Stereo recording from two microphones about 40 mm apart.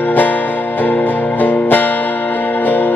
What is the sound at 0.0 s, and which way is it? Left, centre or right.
Music, left.